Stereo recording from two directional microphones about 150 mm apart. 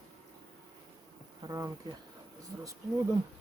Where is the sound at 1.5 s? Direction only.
25° right (ahead or behind).